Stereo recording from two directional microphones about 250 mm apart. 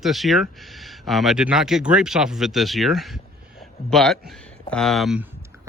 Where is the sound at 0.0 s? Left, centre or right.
Centre.